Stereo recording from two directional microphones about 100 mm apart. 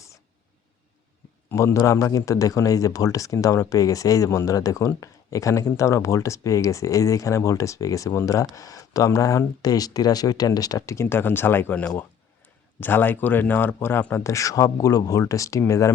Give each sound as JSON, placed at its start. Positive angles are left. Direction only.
{"t": 1.5, "sound": "speech", "side_deg": 30}